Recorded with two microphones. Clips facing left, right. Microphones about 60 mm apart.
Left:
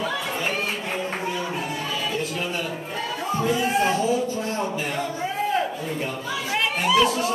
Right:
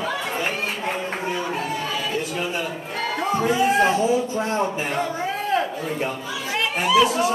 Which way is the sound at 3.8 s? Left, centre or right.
Right.